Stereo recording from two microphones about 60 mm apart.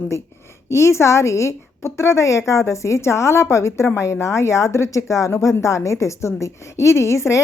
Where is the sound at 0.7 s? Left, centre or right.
Left.